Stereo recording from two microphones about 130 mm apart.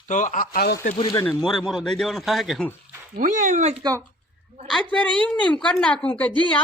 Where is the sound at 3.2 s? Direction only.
70° right (ahead or behind).